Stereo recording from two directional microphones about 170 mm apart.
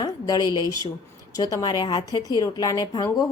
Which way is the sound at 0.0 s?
25° left (ahead or behind).